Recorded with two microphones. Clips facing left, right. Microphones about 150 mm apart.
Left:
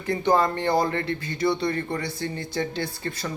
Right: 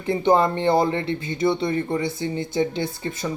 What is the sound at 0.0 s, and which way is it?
Speech, 25° right (ahead or behind).